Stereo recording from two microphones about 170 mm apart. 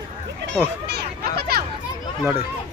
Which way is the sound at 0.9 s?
65° right (ahead or behind).